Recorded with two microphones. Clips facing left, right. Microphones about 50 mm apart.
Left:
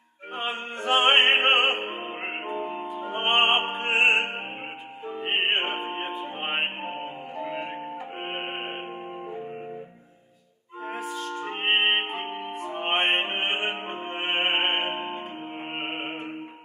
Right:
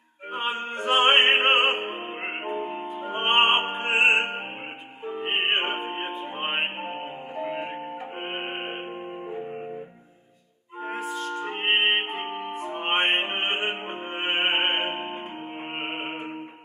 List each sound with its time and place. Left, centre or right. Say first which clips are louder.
0.3 s music: right 2 dB; centre
3.0 s opera: right 1 dB; centre
5.2 s music: even; centre
7.3 s music: right 2 dB; centre
8.2 s music: even; centre
10.9 s music: right 2 dB; centre
16.1 s music: right 1 dB; right